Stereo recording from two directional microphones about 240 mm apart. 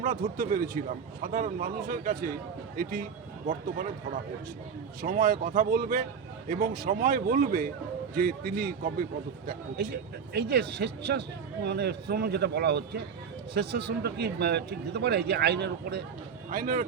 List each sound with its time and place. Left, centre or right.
0.0 s speech: right
5.0 s a man's voice: right
16.5 s speech: right